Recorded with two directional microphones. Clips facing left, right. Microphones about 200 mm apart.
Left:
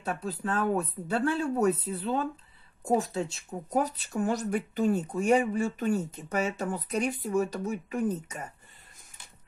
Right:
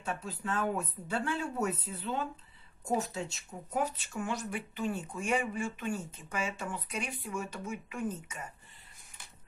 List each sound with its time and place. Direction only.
0.0 s speech: 35° left (ahead or behind)